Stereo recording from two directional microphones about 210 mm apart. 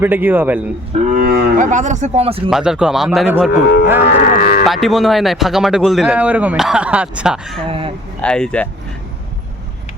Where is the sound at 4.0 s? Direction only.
40° left (ahead or behind).